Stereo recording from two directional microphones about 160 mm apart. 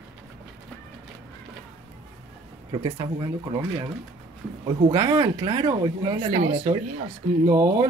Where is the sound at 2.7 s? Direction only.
35° right (ahead or behind).